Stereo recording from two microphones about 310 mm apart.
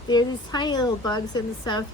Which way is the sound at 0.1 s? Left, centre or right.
Centre.